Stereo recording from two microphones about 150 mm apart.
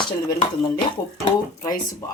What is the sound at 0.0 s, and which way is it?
Speech, 30° left (ahead or behind).